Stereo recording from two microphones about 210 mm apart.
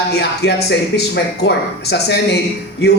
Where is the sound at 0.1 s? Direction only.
50° left (ahead or behind).